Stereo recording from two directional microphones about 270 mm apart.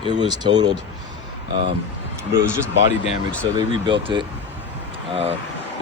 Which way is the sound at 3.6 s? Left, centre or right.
Centre.